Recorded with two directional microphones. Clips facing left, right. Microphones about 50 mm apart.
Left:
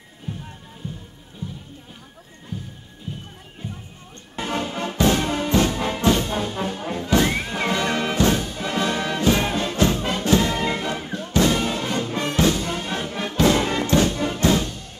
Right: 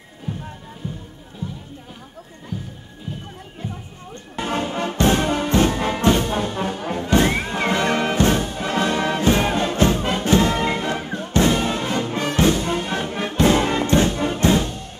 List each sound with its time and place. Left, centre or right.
4.4 s music: right
5.9 s brass instrument: right
6.8 s music: right